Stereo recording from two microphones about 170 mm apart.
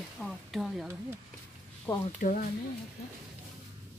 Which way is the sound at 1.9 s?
20° left (ahead or behind).